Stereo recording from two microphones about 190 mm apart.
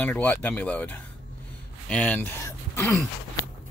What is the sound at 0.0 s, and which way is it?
Speech, 10° left (ahead or behind).